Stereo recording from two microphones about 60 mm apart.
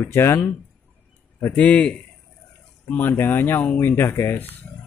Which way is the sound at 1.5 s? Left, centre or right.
Left.